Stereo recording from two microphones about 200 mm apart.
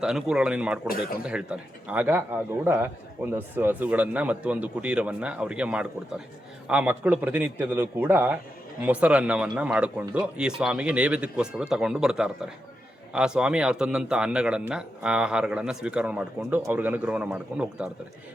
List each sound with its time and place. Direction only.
0.0 s speech: 5° right (ahead or behind)
0.9 s speech: 50° left (ahead or behind)
1.2 s speech: 5° right (ahead or behind)